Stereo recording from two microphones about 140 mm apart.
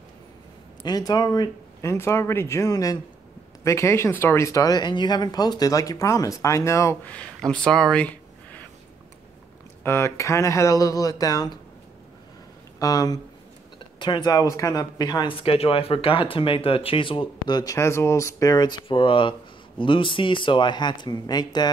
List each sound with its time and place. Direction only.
0.8 s speech: 30° left (ahead or behind)
7.1 s speech: 5° left (ahead or behind)
9.8 s speech: 20° left (ahead or behind)
12.7 s speech: 25° left (ahead or behind)
17.7 s speech: 20° left (ahead or behind)